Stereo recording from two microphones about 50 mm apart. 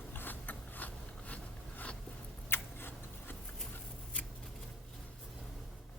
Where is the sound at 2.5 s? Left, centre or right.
Left.